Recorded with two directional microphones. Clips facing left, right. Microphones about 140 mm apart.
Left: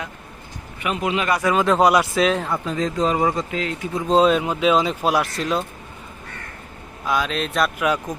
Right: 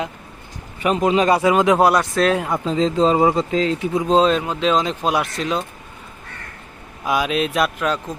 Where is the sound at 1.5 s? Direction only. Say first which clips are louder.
Right 3 dB; 15° right (ahead or behind).